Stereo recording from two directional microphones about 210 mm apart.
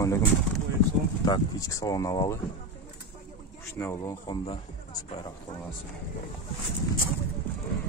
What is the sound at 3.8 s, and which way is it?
Speech, 15° left (ahead or behind).